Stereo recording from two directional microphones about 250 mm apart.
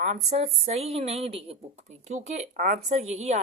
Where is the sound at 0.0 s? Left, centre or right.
Right.